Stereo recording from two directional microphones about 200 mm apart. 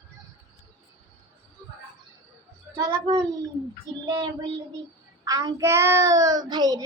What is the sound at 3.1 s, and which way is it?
A man's voice, 25° right (ahead or behind).